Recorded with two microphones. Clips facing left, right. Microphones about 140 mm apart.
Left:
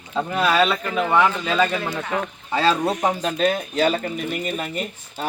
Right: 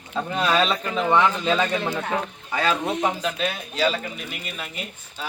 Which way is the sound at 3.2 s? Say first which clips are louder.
Left 6 dB; 45° left (ahead or behind).